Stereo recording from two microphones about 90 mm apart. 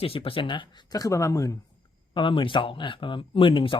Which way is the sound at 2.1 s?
70° left (ahead or behind).